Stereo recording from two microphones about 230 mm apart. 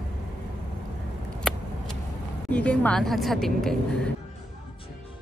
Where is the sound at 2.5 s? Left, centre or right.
Centre.